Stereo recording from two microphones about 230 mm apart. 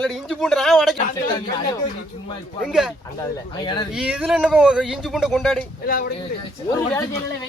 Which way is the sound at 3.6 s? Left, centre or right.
Centre.